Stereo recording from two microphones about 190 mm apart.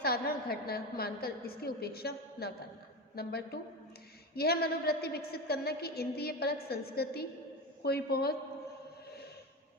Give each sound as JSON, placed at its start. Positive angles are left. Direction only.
{"t": 0.0, "sound": "a woman's voice", "side_deg": 55}
{"t": 9.0, "sound": "chant", "side_deg": 60}